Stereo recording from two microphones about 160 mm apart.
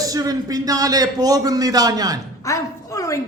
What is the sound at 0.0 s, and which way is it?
Speech, 20° right (ahead or behind).